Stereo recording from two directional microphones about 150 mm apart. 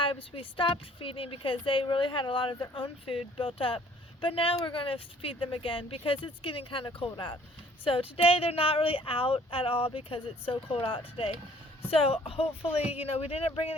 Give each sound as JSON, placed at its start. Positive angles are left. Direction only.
{"t": 0.0, "sound": "a woman's voice", "side_deg": 35}